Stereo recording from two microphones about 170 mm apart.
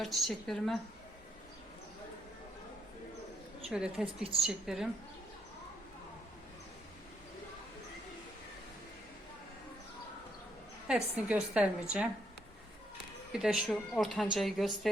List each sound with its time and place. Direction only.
0.0 s a woman's voice: centre (ahead or behind)
3.7 s a woman's voice: 5° right (ahead or behind)
4.2 s a woman's voice: 35° right (ahead or behind)
4.4 s a woman's voice: 5° right (ahead or behind)
10.8 s a woman's voice: 5° right (ahead or behind)
13.3 s a woman's voice: 5° right (ahead or behind)